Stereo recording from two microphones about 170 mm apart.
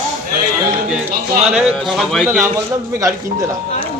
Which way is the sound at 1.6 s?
Centre (ahead or behind).